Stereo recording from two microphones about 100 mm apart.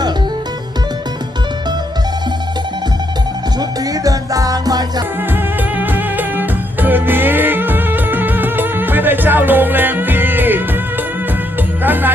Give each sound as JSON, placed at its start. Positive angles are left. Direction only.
{"t": 3.6, "sound": "music", "side_deg": -35}
{"t": 5.3, "sound": "music", "side_deg": -20}
{"t": 11.8, "sound": "music", "side_deg": -20}